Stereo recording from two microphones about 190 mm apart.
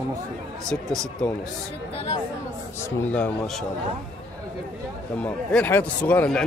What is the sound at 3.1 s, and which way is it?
Speech, 5° left (ahead or behind).